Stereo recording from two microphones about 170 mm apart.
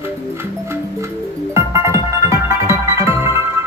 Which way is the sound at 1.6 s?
15° right (ahead or behind).